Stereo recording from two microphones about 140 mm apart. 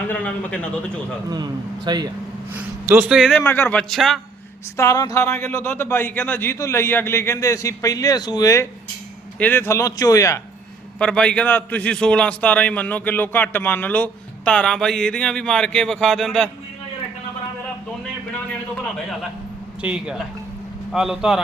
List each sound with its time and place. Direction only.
0.1 s a man's voice: 10° left (ahead or behind)
1.3 s a man's voice: 30° right (ahead or behind)
2.5 s a man's voice: 15° right (ahead or behind)
3.3 s a man's voice: 15° left (ahead or behind)
4.8 s speech: 25° left (ahead or behind)
9.4 s speech: 15° left (ahead or behind)
11.0 s a man's voice: 5° left (ahead or behind)
19.8 s a man's voice: 5° right (ahead or behind)